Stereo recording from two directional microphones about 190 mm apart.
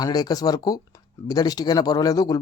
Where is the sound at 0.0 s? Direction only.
20° left (ahead or behind).